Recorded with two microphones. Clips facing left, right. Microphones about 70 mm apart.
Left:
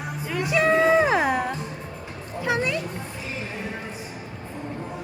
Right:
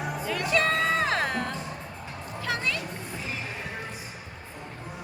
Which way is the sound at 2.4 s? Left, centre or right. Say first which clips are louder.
Left 6 dB; centre.